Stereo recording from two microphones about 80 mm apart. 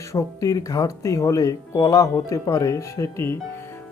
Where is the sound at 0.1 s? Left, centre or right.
Left.